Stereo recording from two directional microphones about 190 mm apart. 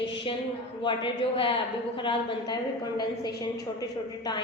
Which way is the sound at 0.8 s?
25° left (ahead or behind).